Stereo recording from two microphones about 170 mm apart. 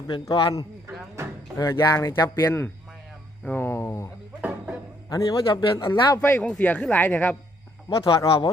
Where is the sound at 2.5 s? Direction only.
10° left (ahead or behind).